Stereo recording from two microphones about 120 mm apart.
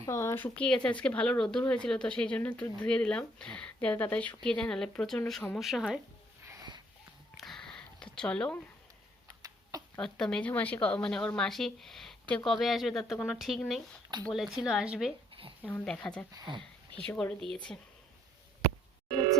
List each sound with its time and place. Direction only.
0.0 s speech: 25° left (ahead or behind); by 6.0 s 5° right (ahead or behind)
6.4 s a sound: 25° right (ahead or behind)
7.3 s a sound: centre (ahead or behind)
8.1 s speech: 10° left (ahead or behind)
10.0 s speech: 5° left (ahead or behind)
15.6 s speech: 10° left (ahead or behind)
16.3 s speech: 40° right (ahead or behind)
17.1 s speech: 15° left (ahead or behind)